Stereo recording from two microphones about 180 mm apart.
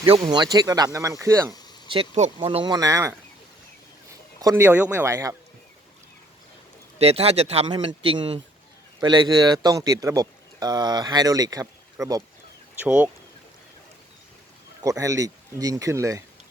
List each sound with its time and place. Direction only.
0.1 s speech: 25° right (ahead or behind)
1.9 s speech: 35° right (ahead or behind); by 3.2 s 15° right (ahead or behind)
4.4 s speech: 15° right (ahead or behind)
7.0 s a man's voice: 35° right (ahead or behind); by 12.2 s 20° right (ahead or behind)
12.7 s speech: 10° right (ahead or behind)
14.8 s speech: 20° right (ahead or behind)